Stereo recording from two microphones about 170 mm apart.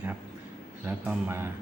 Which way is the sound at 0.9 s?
15° right (ahead or behind).